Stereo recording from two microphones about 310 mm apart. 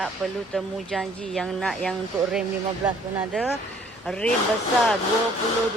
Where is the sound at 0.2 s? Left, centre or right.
Centre.